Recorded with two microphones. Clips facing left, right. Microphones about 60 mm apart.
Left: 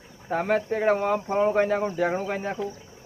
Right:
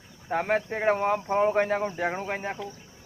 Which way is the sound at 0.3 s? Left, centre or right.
Centre.